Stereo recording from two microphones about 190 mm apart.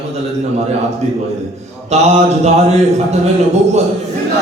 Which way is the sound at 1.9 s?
35° right (ahead or behind).